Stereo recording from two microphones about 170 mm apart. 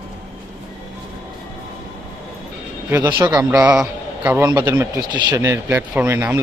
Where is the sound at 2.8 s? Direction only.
15° right (ahead or behind).